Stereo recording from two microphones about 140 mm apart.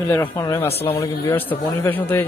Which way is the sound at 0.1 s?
25° left (ahead or behind).